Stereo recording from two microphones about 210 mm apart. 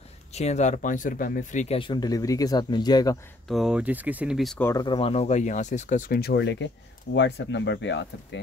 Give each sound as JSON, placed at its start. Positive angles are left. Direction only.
{"t": 0.3, "sound": "speech", "side_deg": 30}
{"t": 3.4, "sound": "speech", "side_deg": 0}
{"t": 4.6, "sound": "speech", "side_deg": 20}